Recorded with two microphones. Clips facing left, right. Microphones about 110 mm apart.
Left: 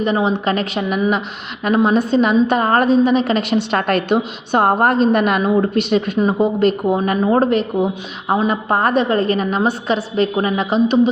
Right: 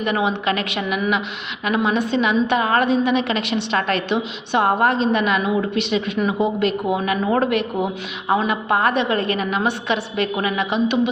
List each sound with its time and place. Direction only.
0.0 s a woman's voice: 35° left (ahead or behind)